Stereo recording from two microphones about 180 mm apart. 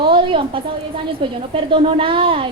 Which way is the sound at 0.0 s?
30° right (ahead or behind).